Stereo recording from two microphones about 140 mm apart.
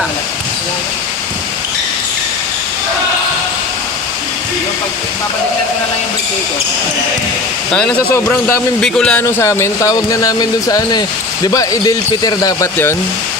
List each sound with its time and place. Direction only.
7.7 s speech: 5° left (ahead or behind)
8.1 s speech: 20° left (ahead or behind)
8.8 s speech: 5° left (ahead or behind)
9.2 s speech: 20° left (ahead or behind)